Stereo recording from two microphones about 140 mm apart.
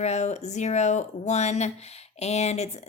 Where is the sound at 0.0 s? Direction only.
55° left (ahead or behind).